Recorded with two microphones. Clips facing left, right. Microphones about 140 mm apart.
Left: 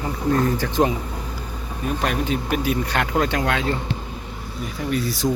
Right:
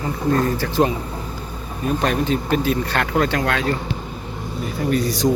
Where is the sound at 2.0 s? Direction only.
10° left (ahead or behind).